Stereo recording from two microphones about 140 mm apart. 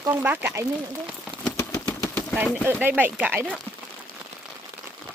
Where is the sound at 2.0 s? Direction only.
5° left (ahead or behind).